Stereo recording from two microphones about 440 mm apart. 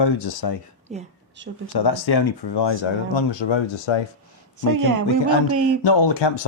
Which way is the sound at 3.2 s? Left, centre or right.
Left.